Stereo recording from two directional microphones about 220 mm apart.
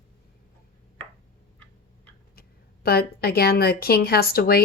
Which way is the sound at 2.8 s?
45° left (ahead or behind).